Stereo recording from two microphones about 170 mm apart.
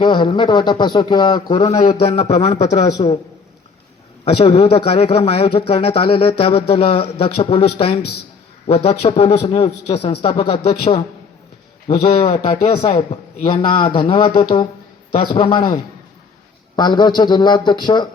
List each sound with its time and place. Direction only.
0.0 s speech: 25° left (ahead or behind)
1.7 s a man's voice: 40° left (ahead or behind)
4.4 s a man's voice: 35° left (ahead or behind)
15.3 s a man's voice: 30° left (ahead or behind)
16.7 s speech: 25° left (ahead or behind)